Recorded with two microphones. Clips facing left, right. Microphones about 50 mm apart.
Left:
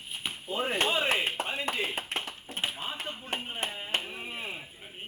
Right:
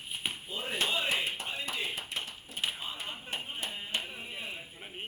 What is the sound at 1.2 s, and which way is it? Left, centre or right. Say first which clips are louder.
Clapping: left 5 dB; left.